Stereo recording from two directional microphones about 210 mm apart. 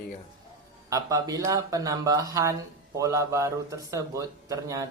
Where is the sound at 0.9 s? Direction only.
15° right (ahead or behind).